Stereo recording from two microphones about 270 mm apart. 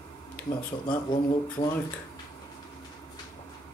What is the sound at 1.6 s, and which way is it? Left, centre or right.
Speech, centre.